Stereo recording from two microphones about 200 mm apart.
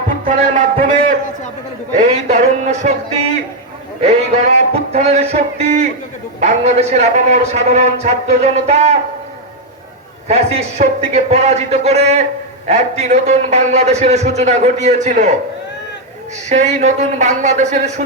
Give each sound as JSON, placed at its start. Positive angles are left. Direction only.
{"t": 0.3, "sound": "a man's voice", "side_deg": -40}
{"t": 2.0, "sound": "a man's voice", "side_deg": -35}
{"t": 4.0, "sound": "a man's voice", "side_deg": -35}
{"t": 10.2, "sound": "a man's voice", "side_deg": -30}
{"t": 16.5, "sound": "a man's voice", "side_deg": -35}